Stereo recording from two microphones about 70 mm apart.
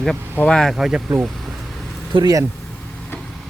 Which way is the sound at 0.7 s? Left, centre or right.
Centre.